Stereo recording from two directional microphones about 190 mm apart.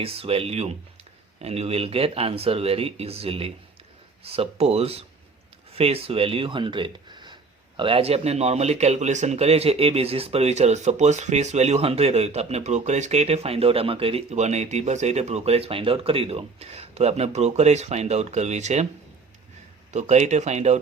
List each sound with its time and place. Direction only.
0.0 s a man's voice: 30° right (ahead or behind)
19.9 s a man's voice: 35° right (ahead or behind)